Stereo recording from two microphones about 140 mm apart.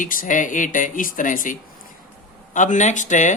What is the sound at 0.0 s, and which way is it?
Speech, 75° left (ahead or behind).